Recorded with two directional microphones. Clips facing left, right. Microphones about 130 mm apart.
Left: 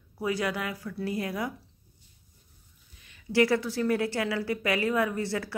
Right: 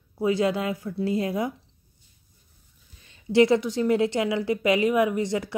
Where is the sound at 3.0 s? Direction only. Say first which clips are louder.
Right 5 dB; 25° right (ahead or behind).